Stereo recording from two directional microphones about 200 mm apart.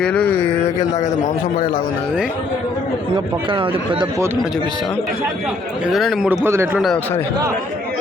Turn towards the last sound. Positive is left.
turn(degrees=-10)  # may be behind; listen again after turning